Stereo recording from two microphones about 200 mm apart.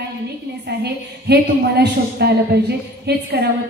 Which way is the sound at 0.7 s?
55° right (ahead or behind).